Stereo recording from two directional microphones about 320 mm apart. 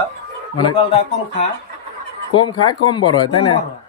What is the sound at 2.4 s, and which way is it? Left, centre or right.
Speech, centre.